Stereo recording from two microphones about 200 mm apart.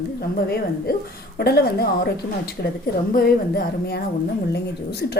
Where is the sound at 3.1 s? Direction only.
50° left (ahead or behind).